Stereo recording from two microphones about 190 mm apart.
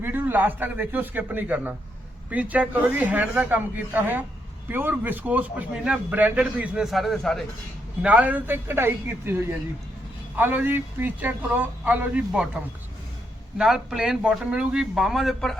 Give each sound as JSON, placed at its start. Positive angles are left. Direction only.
{"t": 0.0, "sound": "a man's voice", "side_deg": -10}
{"t": 13.6, "sound": "speech", "side_deg": 0}